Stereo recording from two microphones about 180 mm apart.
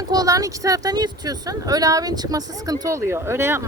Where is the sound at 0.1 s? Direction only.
20° right (ahead or behind).